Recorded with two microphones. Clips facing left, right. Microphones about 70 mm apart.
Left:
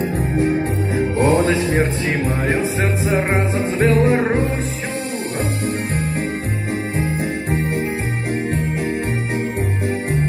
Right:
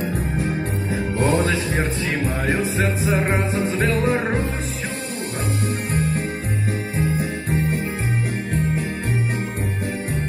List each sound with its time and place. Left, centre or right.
0.9 s music: left